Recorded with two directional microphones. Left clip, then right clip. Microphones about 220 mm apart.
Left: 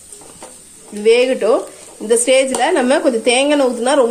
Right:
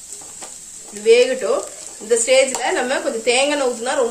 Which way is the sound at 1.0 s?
40° left (ahead or behind).